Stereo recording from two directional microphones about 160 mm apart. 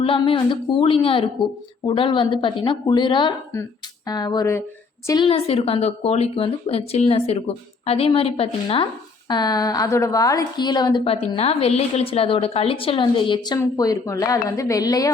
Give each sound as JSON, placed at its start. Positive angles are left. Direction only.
{"t": 0.0, "sound": "a woman's voice", "side_deg": 35}
{"t": 5.3, "sound": "a woman's voice", "side_deg": 35}